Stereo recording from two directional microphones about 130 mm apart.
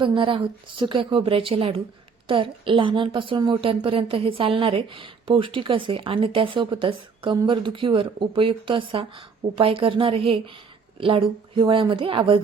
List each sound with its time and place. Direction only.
0.0 s a woman's voice: 40° right (ahead or behind)